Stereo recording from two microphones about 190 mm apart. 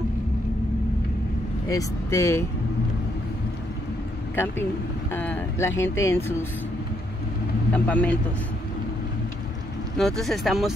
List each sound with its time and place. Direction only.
1.7 s speech: 15° left (ahead or behind)
5.1 s speech: 10° left (ahead or behind)
7.7 s speech: 5° left (ahead or behind)
9.9 s speech: centre (ahead or behind)